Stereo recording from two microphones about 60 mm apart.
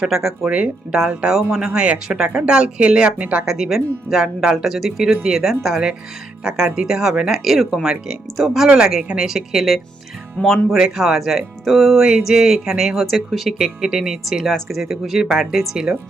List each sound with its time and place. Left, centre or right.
0.0 s speech: centre
10.7 s speech: centre